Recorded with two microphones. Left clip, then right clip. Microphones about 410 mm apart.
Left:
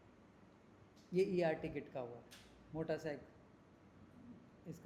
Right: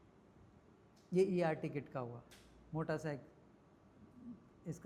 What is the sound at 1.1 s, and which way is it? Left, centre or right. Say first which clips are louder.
Speech: right 1 dB; right.